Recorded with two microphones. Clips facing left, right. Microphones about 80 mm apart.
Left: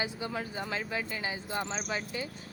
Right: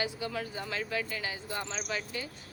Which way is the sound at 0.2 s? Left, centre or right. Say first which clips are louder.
Left 1 dB; left.